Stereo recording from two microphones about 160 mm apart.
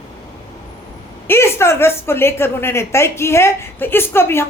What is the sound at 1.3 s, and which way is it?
A woman's voice, 15° left (ahead or behind).